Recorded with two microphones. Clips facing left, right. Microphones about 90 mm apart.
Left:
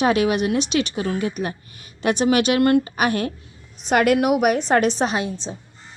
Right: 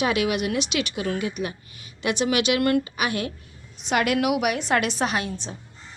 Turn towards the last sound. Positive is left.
turn(degrees=30)  # may be behind; listen again after turning